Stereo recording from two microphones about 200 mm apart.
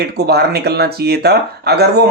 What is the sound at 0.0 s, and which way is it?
Speech, 55° right (ahead or behind).